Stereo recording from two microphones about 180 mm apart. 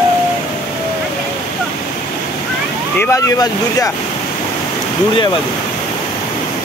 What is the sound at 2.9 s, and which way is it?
Speech, 20° left (ahead or behind).